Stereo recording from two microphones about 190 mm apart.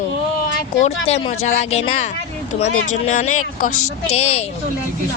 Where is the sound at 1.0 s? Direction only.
35° left (ahead or behind).